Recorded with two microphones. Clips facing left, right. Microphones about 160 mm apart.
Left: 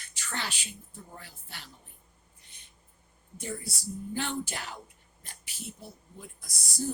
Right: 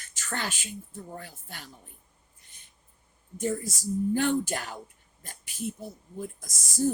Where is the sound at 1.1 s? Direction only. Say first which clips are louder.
Right 6 dB; 45° right (ahead or behind).